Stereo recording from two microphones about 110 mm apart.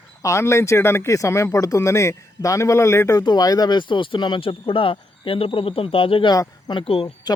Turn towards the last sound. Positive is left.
turn(degrees=55)  # may be behind; listen again after turning